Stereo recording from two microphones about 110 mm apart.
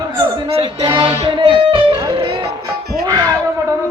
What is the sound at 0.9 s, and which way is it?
Music, 50° right (ahead or behind).